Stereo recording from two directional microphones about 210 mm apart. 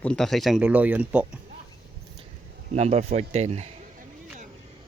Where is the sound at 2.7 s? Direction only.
30° right (ahead or behind).